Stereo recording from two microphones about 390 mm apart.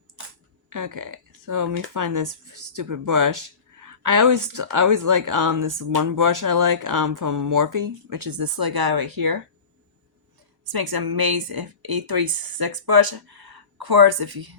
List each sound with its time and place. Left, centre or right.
0.7 s speech: right
10.7 s speech: right